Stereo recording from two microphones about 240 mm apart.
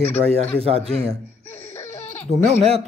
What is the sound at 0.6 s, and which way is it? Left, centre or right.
Speech, right.